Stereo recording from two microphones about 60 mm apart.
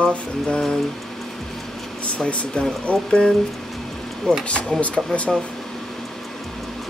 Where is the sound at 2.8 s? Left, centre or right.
Centre.